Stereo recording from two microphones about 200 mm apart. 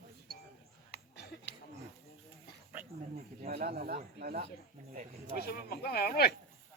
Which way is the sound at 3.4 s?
45° right (ahead or behind).